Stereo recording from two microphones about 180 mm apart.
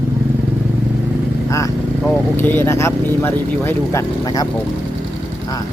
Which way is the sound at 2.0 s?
10° left (ahead or behind).